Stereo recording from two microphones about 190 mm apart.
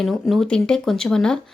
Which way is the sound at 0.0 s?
Centre (ahead or behind).